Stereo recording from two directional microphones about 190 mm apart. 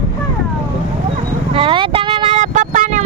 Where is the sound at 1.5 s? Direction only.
25° right (ahead or behind).